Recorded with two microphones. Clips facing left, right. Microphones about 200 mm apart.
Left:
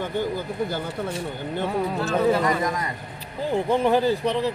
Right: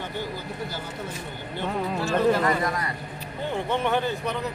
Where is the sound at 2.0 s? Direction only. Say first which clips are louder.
Even; 5° left (ahead or behind).